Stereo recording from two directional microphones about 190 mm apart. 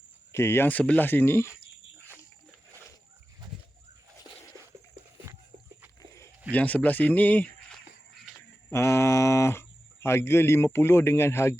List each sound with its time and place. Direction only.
0.3 s speech: 15° left (ahead or behind)
6.0 s walk: 15° left (ahead or behind)
6.5 s speech: 10° left (ahead or behind)
8.7 s speech: 15° left (ahead or behind)